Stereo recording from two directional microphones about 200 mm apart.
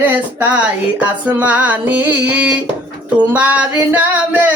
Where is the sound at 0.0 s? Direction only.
10° right (ahead or behind).